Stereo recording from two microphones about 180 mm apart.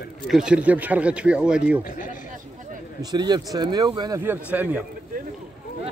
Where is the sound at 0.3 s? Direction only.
5° right (ahead or behind).